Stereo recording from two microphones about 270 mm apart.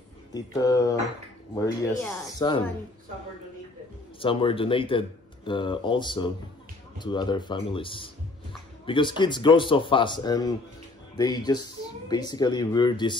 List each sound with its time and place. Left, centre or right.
0.3 s speech: centre
4.2 s speech: centre